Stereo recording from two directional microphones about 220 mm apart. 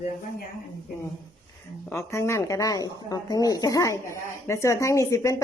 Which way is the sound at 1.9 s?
10° left (ahead or behind).